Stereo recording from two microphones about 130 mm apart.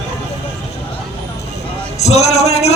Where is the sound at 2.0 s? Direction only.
55° left (ahead or behind).